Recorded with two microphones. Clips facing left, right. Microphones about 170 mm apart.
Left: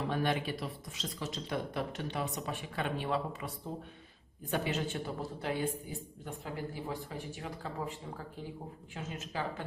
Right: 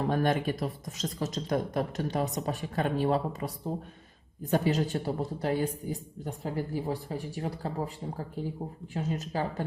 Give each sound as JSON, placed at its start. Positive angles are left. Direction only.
{"t": 0.0, "sound": "speech", "side_deg": -45}
{"t": 4.5, "sound": "a man's voice", "side_deg": -40}